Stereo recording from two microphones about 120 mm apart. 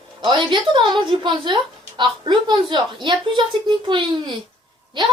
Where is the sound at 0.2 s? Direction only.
40° right (ahead or behind).